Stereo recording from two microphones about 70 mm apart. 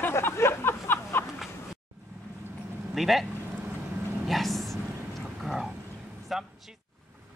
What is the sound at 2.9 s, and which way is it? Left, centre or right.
Speech, centre.